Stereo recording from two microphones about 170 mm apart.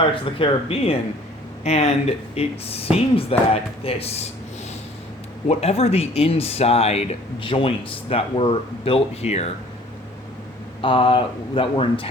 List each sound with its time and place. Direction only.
0.0 s speech: 30° left (ahead or behind)
5.5 s speech: 35° left (ahead or behind)
10.8 s speech: 30° left (ahead or behind)